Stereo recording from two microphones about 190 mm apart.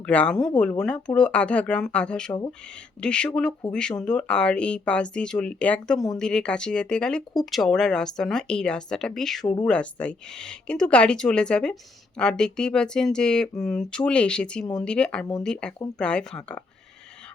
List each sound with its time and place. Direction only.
0.0 s speech: 5° left (ahead or behind)